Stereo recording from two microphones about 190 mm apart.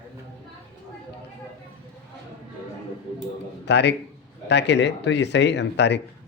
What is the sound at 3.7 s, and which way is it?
Speech, 65° left (ahead or behind).